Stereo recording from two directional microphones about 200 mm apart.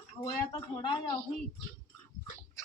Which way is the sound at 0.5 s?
20° left (ahead or behind).